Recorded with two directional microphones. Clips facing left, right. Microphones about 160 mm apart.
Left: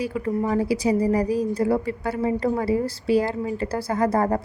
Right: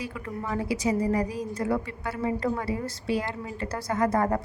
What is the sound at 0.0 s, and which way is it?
A woman's voice, 35° left (ahead or behind).